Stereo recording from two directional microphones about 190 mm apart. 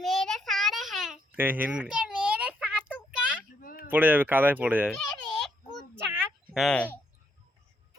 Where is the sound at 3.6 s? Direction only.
50° left (ahead or behind).